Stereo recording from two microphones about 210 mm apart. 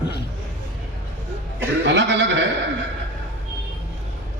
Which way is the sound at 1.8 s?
55° right (ahead or behind).